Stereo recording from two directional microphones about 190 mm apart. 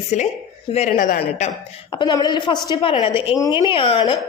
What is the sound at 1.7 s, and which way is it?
Speech, 25° left (ahead or behind).